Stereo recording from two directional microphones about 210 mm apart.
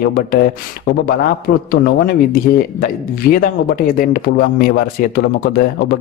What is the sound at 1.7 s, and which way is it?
Speech, 45° left (ahead or behind).